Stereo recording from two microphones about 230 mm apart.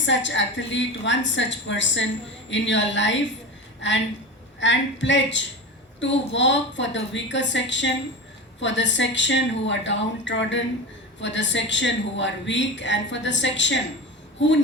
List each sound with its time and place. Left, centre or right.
0.0 s a woman's voice: left